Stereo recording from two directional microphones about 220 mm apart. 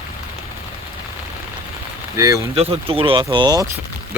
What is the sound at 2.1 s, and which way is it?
Speech, 15° right (ahead or behind).